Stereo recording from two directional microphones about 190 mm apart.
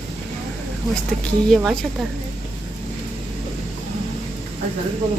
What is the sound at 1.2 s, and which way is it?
Speech, centre (ahead or behind).